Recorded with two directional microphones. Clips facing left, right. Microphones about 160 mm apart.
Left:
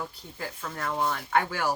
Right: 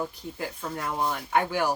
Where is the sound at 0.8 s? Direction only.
20° right (ahead or behind).